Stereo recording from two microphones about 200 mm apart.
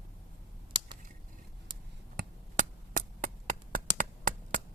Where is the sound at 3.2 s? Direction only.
40° right (ahead or behind).